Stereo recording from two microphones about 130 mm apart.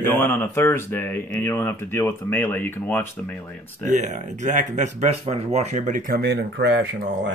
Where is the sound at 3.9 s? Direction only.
70° right (ahead or behind).